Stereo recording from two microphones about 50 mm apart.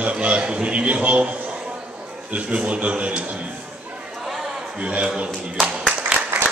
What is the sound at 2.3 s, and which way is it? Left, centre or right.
Speech, right.